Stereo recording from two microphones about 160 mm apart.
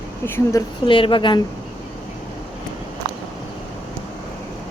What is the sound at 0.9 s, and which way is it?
Speech, 35° left (ahead or behind).